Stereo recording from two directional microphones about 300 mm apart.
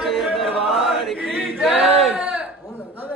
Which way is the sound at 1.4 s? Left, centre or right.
Centre.